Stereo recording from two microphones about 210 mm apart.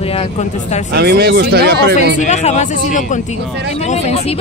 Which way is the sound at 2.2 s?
35° left (ahead or behind).